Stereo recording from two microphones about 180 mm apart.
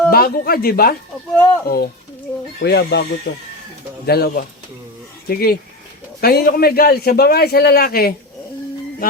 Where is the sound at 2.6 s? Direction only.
65° left (ahead or behind).